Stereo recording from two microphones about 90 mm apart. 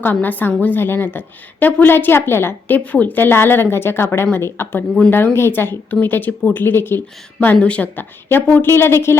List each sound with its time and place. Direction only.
0.0 s a woman's voice: 20° left (ahead or behind)